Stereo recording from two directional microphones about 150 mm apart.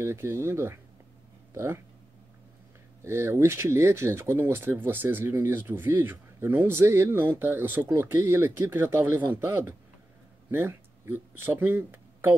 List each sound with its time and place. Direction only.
0.0 s speech: 15° right (ahead or behind)
3.0 s speech: 20° right (ahead or behind)